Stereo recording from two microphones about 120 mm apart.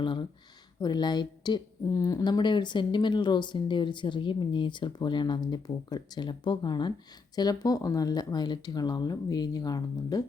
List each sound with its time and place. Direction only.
0.0 s a woman's voice: 45° left (ahead or behind)